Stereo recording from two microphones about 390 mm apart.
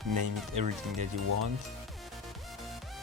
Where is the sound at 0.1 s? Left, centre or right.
Right.